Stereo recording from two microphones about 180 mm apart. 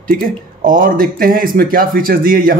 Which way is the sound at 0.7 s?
50° right (ahead or behind).